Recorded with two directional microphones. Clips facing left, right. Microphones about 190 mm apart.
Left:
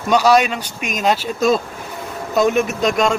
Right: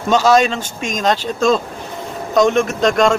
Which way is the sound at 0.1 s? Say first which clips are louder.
Right 1 dB; 10° left (ahead or behind).